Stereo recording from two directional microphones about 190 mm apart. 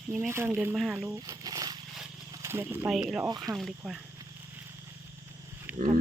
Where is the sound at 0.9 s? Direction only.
15° right (ahead or behind).